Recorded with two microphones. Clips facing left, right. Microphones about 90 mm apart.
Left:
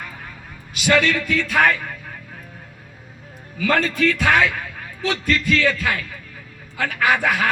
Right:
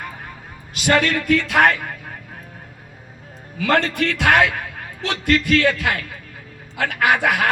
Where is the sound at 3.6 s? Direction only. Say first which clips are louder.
Even; 70° right (ahead or behind).